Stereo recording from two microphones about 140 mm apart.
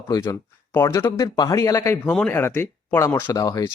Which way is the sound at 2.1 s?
10° left (ahead or behind).